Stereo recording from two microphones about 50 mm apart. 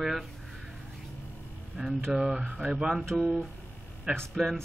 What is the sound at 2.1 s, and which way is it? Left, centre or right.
Speech, centre.